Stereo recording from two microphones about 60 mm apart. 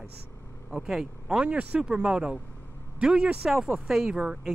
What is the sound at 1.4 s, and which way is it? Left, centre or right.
Speech, right.